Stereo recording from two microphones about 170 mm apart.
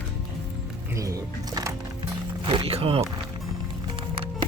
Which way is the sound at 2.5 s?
35° right (ahead or behind).